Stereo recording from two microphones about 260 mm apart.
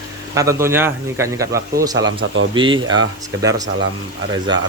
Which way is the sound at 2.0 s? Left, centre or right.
Right.